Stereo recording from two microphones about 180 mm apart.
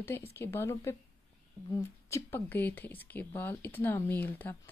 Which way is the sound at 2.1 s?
10° left (ahead or behind).